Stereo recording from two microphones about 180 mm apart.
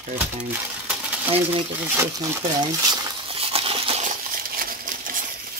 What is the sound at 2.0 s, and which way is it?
Speech, 15° right (ahead or behind).